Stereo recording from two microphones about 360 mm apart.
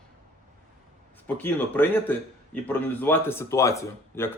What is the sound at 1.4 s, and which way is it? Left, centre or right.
Speech, centre.